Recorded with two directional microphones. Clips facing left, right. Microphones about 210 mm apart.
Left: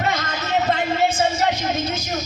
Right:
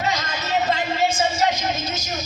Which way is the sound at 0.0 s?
55° left (ahead or behind).